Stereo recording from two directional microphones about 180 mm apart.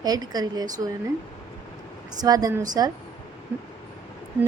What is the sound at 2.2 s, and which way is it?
Speech, 20° right (ahead or behind).